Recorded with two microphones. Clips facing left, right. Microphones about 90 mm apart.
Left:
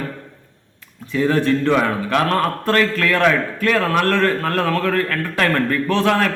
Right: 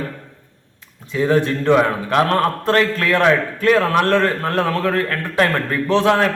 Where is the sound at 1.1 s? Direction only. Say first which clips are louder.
Even; 25° right (ahead or behind).